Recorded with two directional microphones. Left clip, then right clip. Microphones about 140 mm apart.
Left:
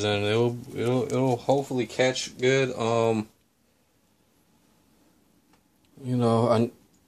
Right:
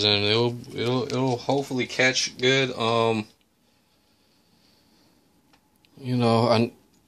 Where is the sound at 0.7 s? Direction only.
15° left (ahead or behind).